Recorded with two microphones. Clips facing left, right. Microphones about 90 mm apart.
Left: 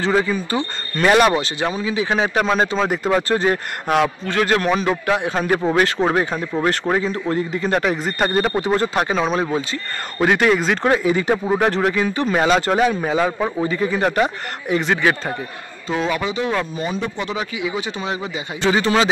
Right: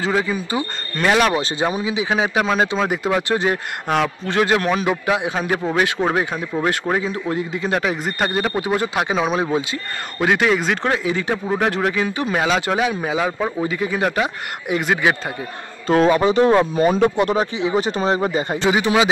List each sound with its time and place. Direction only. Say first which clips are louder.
0.0 s speech: left 2 dB; 5° right (ahead or behind)
1.3 s a man's voice: right 1 dB; 15° right (ahead or behind)
4.3 s a man's voice: right 4 dB; 15° right (ahead or behind)
4.6 s a man's voice: left 1 dB; 5° right (ahead or behind)
10.1 s a man's voice: left 1 dB; centre (ahead or behind)
16.1 s speech: right 8 dB; 40° right (ahead or behind)
16.7 s speech: right 8 dB; 50° right (ahead or behind)
17.6 s speech: right 5 dB; 35° right (ahead or behind)
18.6 s a man's voice: left 1 dB; 15° right (ahead or behind)